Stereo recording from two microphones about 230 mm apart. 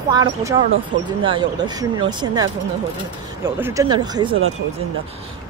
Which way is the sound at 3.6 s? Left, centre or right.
Centre.